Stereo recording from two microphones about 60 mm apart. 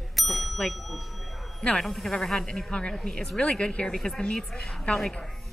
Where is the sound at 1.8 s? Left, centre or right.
Centre.